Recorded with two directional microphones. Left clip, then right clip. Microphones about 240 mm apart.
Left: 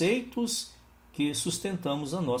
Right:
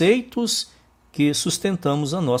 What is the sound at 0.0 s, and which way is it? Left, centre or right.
Speech, right.